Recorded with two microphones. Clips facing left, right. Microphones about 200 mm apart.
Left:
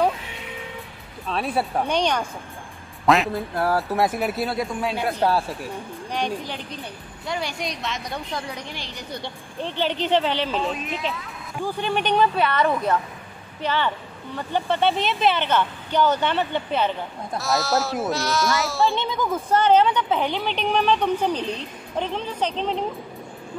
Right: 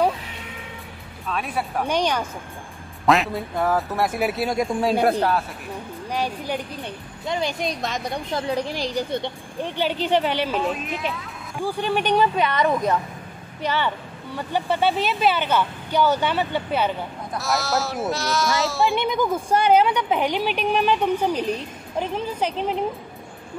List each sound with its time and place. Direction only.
1.3 s speech: 30° left (ahead or behind)
1.9 s a woman's voice: 10° right (ahead or behind)
4.8 s a man's voice: 45° right (ahead or behind)
6.1 s a woman's voice: 10° right (ahead or behind)
7.2 s a woman's voice: 20° right (ahead or behind); by 9.0 s 35° right (ahead or behind)
9.1 s a woman's voice: 15° right (ahead or behind); by 18.9 s centre (ahead or behind)
18.9 s a woman's voice: 15° right (ahead or behind)